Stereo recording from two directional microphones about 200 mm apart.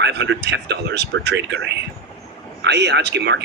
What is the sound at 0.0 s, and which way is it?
Speech, 60° right (ahead or behind).